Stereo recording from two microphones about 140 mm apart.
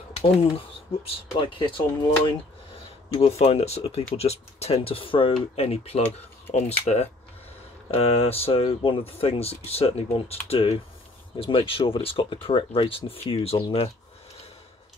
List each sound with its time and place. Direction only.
0.1 s speech: 45° left (ahead or behind)
3.2 s speech: 50° left (ahead or behind)
7.9 s speech: 45° left (ahead or behind)